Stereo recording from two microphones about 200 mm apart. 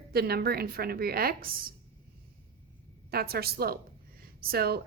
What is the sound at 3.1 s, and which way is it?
Speech, 50° right (ahead or behind).